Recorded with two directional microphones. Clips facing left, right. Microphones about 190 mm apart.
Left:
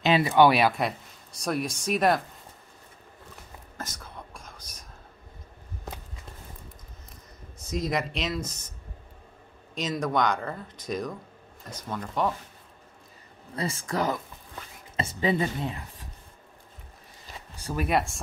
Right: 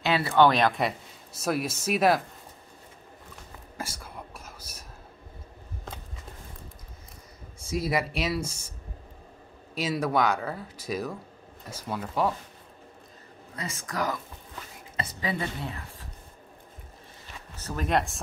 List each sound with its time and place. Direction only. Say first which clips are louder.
0.0 s speech: left 2 dB; 15° left (ahead or behind); by 2.2 s 5° right (ahead or behind)
3.7 s whispering: right 2 dB; 10° right (ahead or behind)
7.5 s speech: right 1 dB; 10° right (ahead or behind)
9.8 s speech: right 1 dB; 5° right (ahead or behind)
13.6 s a woman's voice: left 4 dB; 30° left (ahead or behind)
17.6 s speech: left 1 dB; 10° left (ahead or behind)